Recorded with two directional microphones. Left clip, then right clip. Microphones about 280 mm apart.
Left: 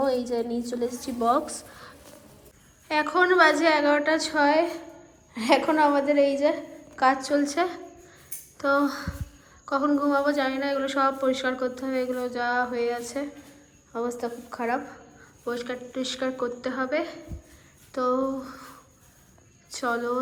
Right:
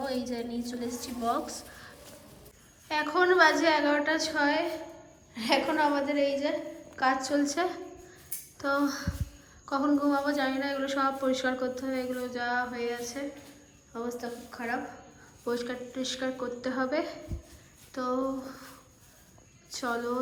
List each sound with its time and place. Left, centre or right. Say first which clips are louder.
0.0 s a woman's voice: left 8 dB; centre
8.8 s child singing: left 4 dB; centre
9.6 s a woman's voice: left 3 dB; centre
10.2 s child singing: left 4 dB; centre
10.6 s a woman's voice: left 5 dB; centre
11.9 s child singing: left 6 dB; centre
12.3 s a woman's voice: left 4 dB; centre
19.7 s a woman's voice: left 5 dB; centre